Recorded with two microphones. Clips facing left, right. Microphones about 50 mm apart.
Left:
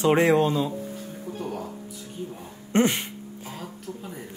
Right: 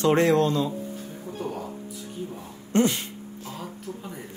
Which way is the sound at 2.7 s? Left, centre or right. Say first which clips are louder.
Even; left.